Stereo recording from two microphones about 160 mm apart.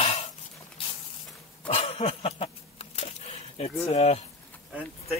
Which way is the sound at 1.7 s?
40° left (ahead or behind).